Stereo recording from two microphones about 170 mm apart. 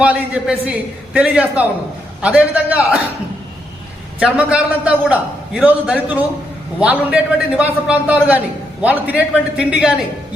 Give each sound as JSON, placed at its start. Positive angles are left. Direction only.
{"t": 0.0, "sound": "a man's voice", "side_deg": -10}
{"t": 4.2, "sound": "a man's voice", "side_deg": -5}